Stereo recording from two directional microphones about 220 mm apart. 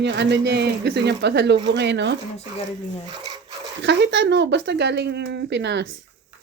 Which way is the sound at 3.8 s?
55° right (ahead or behind).